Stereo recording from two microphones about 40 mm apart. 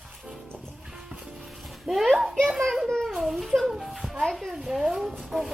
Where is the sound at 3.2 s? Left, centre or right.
Centre.